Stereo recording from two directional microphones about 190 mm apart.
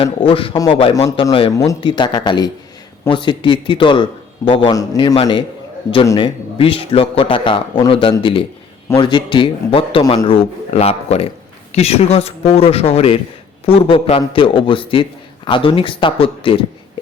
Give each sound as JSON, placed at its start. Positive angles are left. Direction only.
{"t": 0.0, "sound": "a man's voice", "side_deg": 30}